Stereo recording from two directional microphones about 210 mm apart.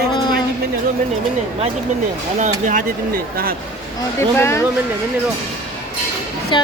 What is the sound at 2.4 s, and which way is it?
Speech, 35° right (ahead or behind).